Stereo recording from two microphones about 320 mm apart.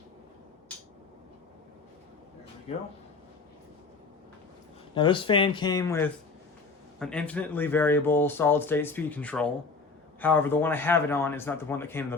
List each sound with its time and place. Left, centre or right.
2.7 s speech: centre
4.9 s a man's voice: centre